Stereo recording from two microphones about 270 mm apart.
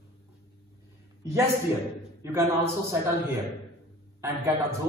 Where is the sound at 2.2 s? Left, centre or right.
Centre.